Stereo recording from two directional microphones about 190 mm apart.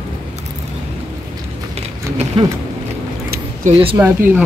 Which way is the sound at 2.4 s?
30° right (ahead or behind).